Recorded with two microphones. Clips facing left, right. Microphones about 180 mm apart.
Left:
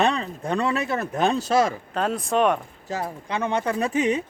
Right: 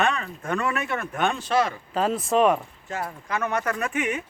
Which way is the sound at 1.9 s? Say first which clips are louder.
Right 4 dB; centre (ahead or behind).